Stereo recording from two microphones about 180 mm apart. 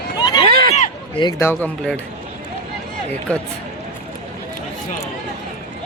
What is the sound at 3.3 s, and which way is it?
Speech, 5° left (ahead or behind).